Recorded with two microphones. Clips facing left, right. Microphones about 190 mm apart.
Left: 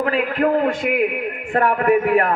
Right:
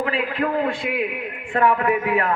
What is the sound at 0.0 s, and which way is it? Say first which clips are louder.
Speech: left 4 dB; 45° left (ahead or behind).